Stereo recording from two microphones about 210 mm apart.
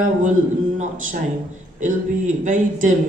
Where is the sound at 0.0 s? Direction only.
35° right (ahead or behind).